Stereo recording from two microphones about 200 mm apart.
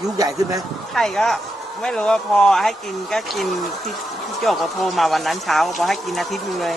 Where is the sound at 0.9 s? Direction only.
Centre (ahead or behind).